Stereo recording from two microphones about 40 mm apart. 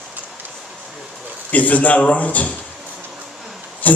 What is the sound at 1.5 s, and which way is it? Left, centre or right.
A man's voice, left.